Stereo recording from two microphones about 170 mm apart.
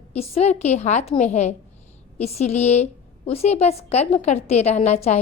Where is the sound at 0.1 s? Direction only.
40° left (ahead or behind).